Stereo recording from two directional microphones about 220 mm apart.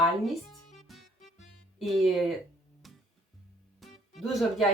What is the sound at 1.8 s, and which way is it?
Speech, centre (ahead or behind).